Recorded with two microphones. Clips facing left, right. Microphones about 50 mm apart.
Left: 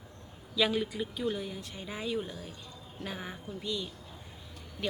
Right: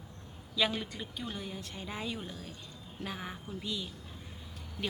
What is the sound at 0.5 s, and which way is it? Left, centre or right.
Speech, centre.